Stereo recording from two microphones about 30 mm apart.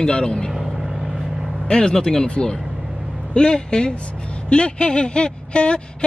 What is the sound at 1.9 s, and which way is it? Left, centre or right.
Speech, left.